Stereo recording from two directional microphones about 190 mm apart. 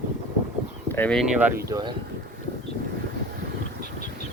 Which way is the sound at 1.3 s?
10° right (ahead or behind).